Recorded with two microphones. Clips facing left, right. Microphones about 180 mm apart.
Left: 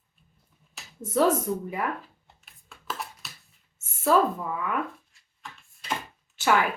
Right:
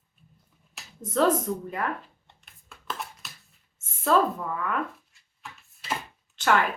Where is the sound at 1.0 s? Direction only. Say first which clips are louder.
Even; 10° left (ahead or behind).